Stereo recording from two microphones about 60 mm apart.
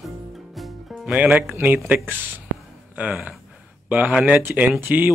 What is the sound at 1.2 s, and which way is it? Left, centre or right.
Speech, right.